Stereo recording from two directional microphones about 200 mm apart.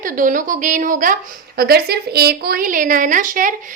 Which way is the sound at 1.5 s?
50° right (ahead or behind).